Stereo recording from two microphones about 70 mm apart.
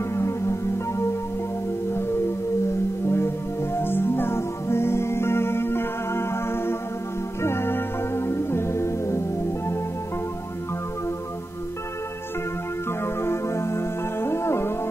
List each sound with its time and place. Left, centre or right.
0.1 s music: left
3.1 s music: left
7.4 s organ: left
13.0 s music: left